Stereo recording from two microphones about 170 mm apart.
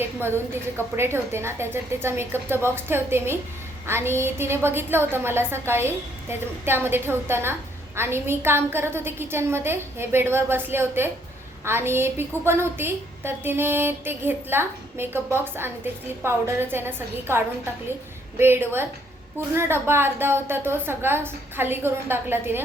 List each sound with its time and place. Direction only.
0.0 s a woman's voice: 15° right (ahead or behind)